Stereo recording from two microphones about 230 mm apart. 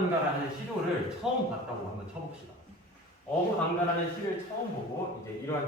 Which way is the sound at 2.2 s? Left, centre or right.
Right.